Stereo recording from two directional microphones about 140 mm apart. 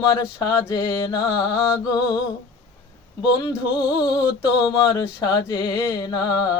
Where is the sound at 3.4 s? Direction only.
35° left (ahead or behind).